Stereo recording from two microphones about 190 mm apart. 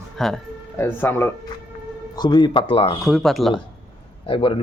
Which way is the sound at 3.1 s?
Centre (ahead or behind).